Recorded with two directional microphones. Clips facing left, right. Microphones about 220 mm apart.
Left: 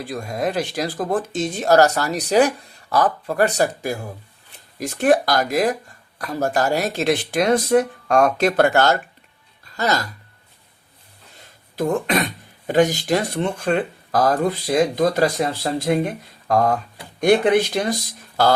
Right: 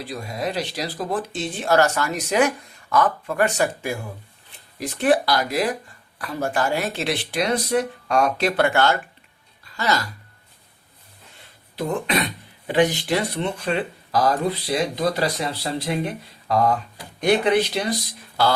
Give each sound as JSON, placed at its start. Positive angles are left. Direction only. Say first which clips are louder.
{"t": 0.0, "sound": "speech", "louder": "left 4 dB", "side_deg": 50}
{"t": 11.8, "sound": "speech", "louder": "left 3 dB", "side_deg": 45}